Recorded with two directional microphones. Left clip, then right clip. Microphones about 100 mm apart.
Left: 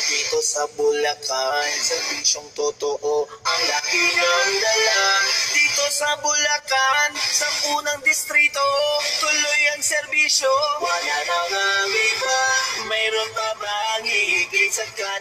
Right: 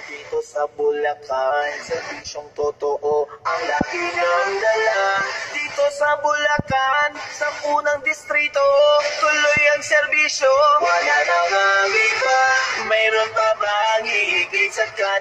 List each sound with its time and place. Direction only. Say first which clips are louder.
0.6 s music: right 3 dB; 15° left (ahead or behind)